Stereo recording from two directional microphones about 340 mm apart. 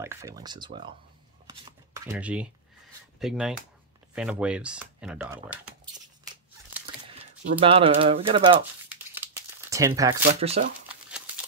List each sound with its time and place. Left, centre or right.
0.0 s speech: centre
1.5 s shuffling cards: centre
3.2 s speech: centre
4.1 s typing: centre
7.6 s speech: centre
8.8 s crumpling: centre
10.4 s speech: centre
10.9 s crumpling: centre